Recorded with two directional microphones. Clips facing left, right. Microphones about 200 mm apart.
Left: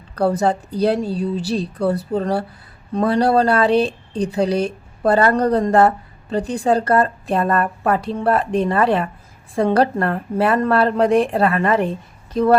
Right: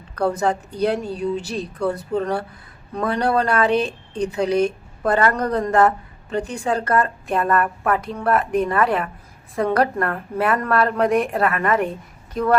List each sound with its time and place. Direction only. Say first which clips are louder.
0.2 s speech: left 3 dB; 35° left (ahead or behind)